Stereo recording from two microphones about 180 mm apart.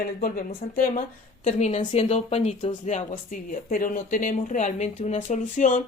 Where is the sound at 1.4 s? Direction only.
40° left (ahead or behind).